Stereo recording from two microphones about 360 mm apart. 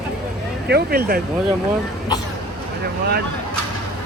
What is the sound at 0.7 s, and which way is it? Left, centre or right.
Speech, right.